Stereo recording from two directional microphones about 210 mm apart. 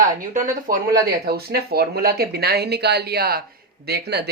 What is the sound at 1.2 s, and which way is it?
Speech, 50° right (ahead or behind).